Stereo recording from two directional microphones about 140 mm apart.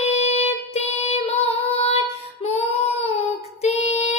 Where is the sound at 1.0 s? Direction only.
45° left (ahead or behind).